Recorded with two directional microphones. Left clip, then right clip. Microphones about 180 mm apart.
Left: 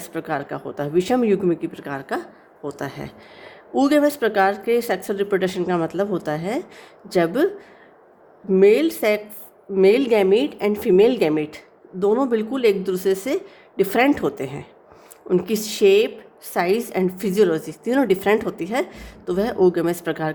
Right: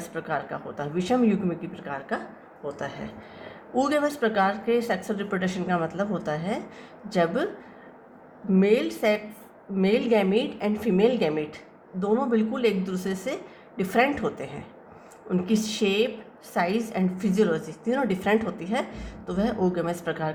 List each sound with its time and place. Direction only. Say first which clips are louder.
0.0 s a woman's voice: left 4 dB; 50° left (ahead or behind)
3.8 s a woman's voice: left 6 dB; 45° left (ahead or behind)
8.5 s a woman's voice: left 8 dB; 50° left (ahead or behind)